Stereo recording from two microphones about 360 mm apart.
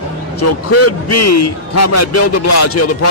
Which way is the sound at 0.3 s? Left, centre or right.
Left.